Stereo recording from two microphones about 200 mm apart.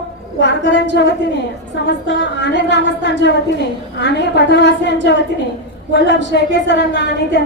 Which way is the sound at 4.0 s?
60° left (ahead or behind).